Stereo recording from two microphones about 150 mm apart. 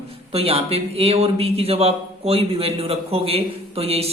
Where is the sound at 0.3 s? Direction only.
40° right (ahead or behind).